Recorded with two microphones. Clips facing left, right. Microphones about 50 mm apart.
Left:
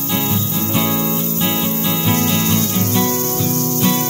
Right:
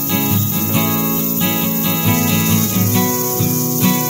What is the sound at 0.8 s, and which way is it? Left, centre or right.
Music, right.